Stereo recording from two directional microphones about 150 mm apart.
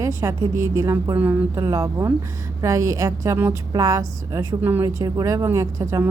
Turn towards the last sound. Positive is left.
turn(degrees=-20)  # may be behind; listen again after turning